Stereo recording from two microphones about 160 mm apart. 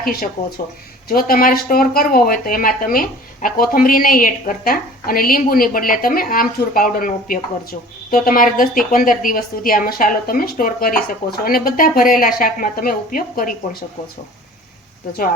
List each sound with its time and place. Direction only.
0.0 s speech: 65° left (ahead or behind)